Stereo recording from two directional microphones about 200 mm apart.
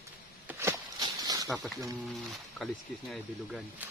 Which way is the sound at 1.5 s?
Centre (ahead or behind).